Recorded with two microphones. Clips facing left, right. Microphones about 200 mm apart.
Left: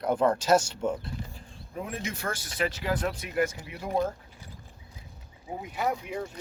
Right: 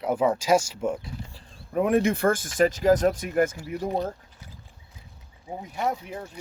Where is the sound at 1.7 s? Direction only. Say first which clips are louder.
Right 14 dB; 65° right (ahead or behind); by 3.8 s 45° right (ahead or behind).